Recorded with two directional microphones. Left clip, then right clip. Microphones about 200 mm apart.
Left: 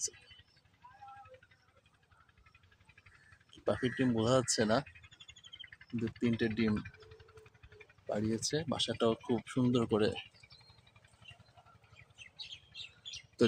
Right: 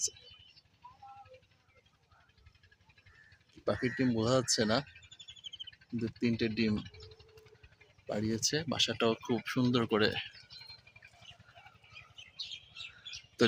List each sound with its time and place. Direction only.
3.6 s speech: 20° right (ahead or behind)
6.0 s speech: 15° right (ahead or behind)
8.0 s speech: 15° right (ahead or behind)